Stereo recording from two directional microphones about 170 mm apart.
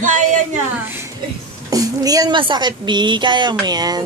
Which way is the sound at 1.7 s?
20° right (ahead or behind).